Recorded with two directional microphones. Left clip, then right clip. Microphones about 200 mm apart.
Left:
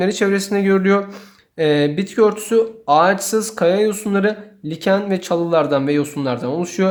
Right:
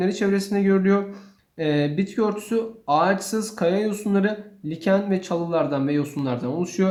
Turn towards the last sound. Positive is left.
turn(degrees=30)  # may be behind; listen again after turning